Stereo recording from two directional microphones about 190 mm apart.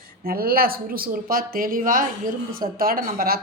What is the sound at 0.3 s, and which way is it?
A woman's voice, 50° right (ahead or behind).